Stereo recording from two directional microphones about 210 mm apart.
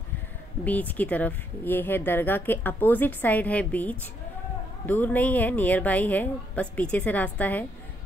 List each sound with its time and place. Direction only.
0.7 s speech: 10° left (ahead or behind)